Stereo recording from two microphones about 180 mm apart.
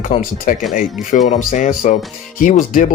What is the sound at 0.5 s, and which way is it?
Speech, 50° left (ahead or behind).